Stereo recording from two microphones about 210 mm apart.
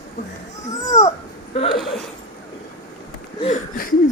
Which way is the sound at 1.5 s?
25° left (ahead or behind).